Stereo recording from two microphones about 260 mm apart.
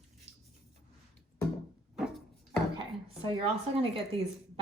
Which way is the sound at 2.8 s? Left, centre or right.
Centre.